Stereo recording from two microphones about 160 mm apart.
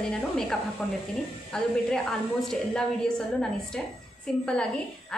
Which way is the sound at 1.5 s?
5° left (ahead or behind).